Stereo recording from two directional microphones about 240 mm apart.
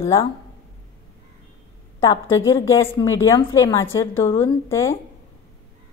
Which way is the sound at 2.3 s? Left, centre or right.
Left.